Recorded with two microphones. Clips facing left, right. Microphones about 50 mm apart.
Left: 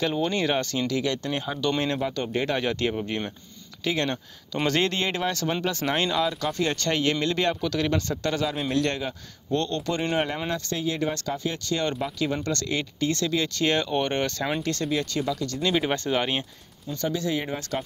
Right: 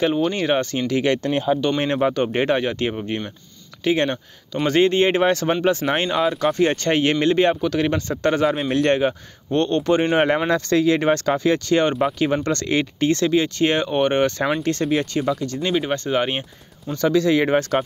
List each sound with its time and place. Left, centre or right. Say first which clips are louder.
0.2 s speech: right 5 dB; centre
0.7 s speech: right 6 dB; right
1.6 s speech: right 4 dB; centre
2.2 s speech: right 8 dB; right
2.6 s speech: right 3 dB; centre
5.0 s speech: right 9 dB; right
10.0 s speech: right 8 dB; right
13.4 s speech: right 5 dB; right
14.6 s speech: right 6 dB; right
15.7 s speech: right 3 dB; centre
16.1 s speech: right 4 dB; centre
16.8 s speech: right 8 dB; right
17.1 s speech: right 12 dB; right
17.6 s speech: right 11 dB; right